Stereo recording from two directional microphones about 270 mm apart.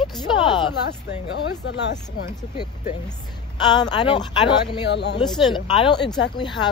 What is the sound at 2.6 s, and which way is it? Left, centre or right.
Speech, centre.